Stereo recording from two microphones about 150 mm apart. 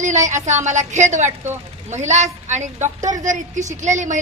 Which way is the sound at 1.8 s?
50° right (ahead or behind).